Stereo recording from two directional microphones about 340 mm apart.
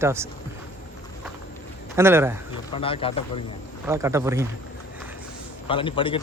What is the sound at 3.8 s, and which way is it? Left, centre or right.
Speech, centre.